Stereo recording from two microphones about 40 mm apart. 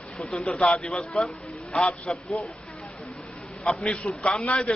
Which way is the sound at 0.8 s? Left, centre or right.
Centre.